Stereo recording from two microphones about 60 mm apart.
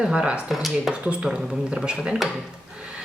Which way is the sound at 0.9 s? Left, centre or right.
Centre.